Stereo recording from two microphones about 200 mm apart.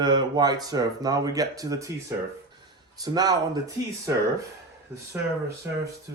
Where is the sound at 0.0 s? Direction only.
20° right (ahead or behind).